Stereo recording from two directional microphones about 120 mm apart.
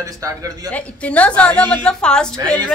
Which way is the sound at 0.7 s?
10° left (ahead or behind).